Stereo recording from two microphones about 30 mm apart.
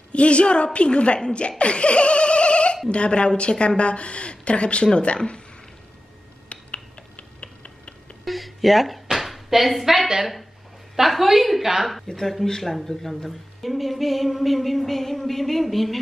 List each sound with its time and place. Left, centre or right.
0.1 s a woman's voice: left
1.6 s laughter: left
2.9 s a woman's voice: left
6.5 s finger snapping: left
8.3 s a sound: centre
11.0 s a woman's voice: centre
12.4 s a woman's voice: centre